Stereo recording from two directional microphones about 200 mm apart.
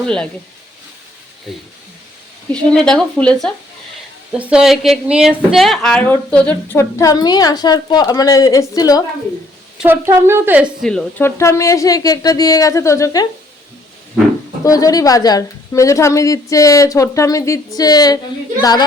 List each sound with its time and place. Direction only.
0.0 s speech: 5° left (ahead or behind)
1.5 s speech: centre (ahead or behind); by 9.0 s 20° left (ahead or behind)
9.7 s a woman's voice: 10° right (ahead or behind)
10.8 s speech: 10° left (ahead or behind)
14.6 s speech: 15° left (ahead or behind)